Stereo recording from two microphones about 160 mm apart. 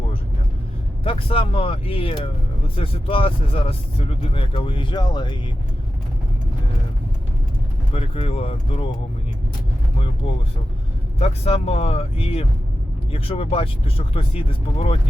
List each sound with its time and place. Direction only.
1.0 s speech: 35° left (ahead or behind)
7.9 s speech: 35° left (ahead or behind)
11.2 s speech: 40° left (ahead or behind)